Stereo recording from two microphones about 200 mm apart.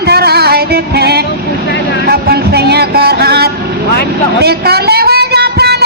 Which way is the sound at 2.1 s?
50° right (ahead or behind).